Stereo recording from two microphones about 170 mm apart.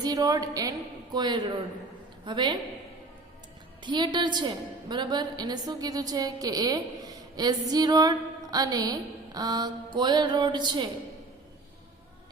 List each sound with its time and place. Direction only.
0.0 s a woman's voice: 20° right (ahead or behind)
3.8 s a woman's voice: 25° right (ahead or behind)